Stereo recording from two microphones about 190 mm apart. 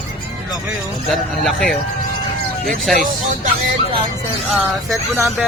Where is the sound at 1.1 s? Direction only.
Centre (ahead or behind).